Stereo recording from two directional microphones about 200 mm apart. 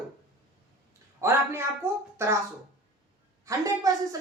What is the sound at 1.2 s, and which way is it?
Speech, 10° right (ahead or behind).